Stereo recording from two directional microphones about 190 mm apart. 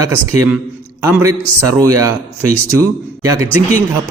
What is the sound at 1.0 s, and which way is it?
A man's voice, 15° right (ahead or behind).